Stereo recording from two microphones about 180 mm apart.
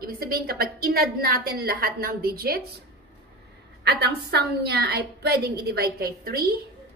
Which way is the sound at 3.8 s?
65° right (ahead or behind).